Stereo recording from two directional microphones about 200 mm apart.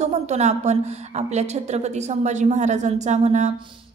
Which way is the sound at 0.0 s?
35° right (ahead or behind).